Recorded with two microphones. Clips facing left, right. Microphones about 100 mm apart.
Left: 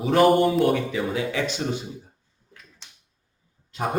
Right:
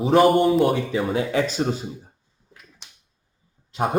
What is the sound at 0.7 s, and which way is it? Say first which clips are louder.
Speech: right 2 dB; 30° right (ahead or behind).